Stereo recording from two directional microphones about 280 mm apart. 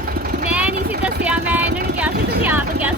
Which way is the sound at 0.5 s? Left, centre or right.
Centre.